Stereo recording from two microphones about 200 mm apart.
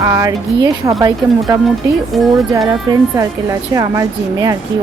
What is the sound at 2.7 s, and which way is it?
Speech, 20° right (ahead or behind).